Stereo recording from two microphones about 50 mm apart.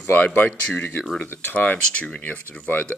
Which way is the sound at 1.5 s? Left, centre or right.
Left.